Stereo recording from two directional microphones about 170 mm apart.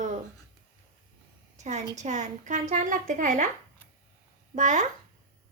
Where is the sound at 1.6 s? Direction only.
40° right (ahead or behind).